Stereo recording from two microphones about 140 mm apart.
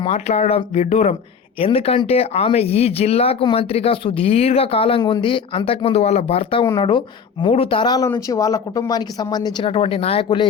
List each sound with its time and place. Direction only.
0.0 s speech: 50° left (ahead or behind)
1.5 s a woman's voice: 45° left (ahead or behind)